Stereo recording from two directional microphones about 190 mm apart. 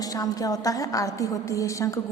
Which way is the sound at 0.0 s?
20° left (ahead or behind).